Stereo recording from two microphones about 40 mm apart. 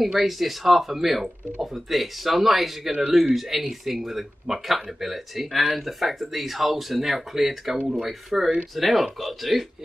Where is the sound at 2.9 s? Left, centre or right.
Centre.